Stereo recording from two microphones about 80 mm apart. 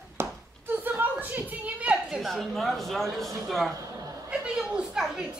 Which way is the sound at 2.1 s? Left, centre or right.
Centre.